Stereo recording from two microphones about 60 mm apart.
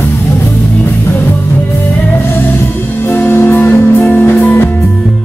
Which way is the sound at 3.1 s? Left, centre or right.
Left.